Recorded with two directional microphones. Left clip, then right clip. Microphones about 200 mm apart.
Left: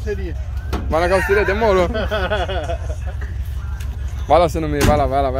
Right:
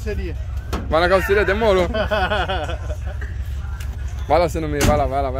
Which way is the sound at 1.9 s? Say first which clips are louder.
Right 1 dB; 60° right (ahead or behind).